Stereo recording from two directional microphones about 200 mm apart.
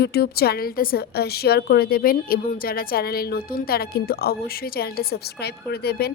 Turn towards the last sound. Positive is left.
turn(degrees=50)  # may be behind; listen again after turning